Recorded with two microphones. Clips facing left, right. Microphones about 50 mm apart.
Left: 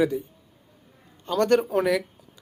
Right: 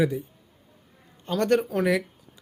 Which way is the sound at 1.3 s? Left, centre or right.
Centre.